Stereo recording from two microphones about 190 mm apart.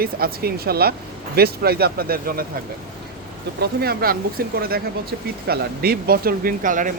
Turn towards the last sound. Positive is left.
turn(degrees=-45)  # may be behind; listen again after turning